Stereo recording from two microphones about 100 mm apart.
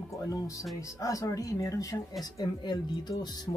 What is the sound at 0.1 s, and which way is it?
Speech, 30° left (ahead or behind).